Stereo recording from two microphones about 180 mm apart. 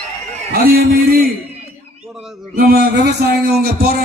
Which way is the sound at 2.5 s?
55° right (ahead or behind).